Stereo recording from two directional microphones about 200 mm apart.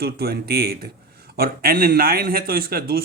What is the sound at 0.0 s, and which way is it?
A man's voice, 50° right (ahead or behind).